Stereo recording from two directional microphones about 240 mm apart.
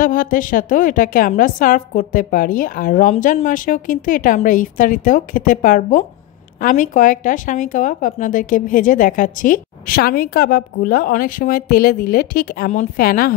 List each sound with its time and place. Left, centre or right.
0.0 s speech: left